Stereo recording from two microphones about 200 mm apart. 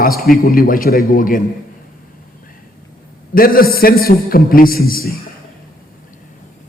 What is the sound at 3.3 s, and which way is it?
A man's voice, 45° left (ahead or behind).